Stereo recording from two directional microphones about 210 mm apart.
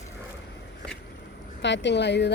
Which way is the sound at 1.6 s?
55° left (ahead or behind).